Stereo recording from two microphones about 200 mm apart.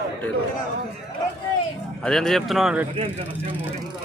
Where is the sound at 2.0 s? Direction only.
Centre (ahead or behind).